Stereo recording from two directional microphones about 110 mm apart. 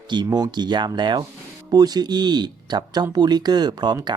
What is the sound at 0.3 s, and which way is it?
Speech, 35° right (ahead or behind).